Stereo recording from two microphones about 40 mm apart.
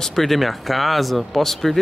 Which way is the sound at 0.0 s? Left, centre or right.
Centre.